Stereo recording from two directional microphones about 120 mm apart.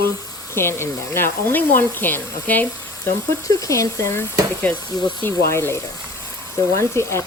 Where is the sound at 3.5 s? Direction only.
30° left (ahead or behind).